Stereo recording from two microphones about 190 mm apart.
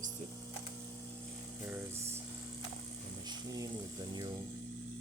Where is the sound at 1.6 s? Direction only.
10° right (ahead or behind).